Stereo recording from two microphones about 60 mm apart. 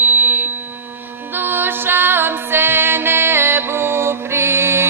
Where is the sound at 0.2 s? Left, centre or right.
Right.